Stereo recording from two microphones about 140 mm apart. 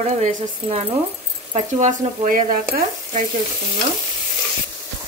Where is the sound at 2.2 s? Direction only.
75° right (ahead or behind).